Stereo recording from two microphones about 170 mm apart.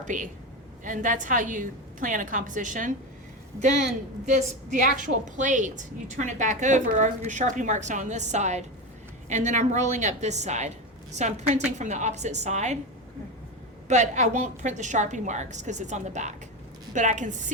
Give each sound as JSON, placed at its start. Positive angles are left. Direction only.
{"t": 0.0, "sound": "a woman's voice", "side_deg": -50}
{"t": 4.3, "sound": "a woman's voice", "side_deg": -45}
{"t": 13.8, "sound": "a woman's voice", "side_deg": -45}